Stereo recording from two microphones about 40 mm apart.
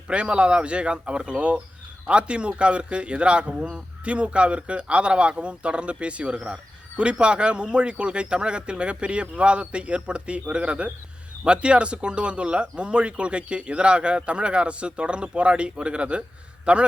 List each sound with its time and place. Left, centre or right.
0.1 s speech: right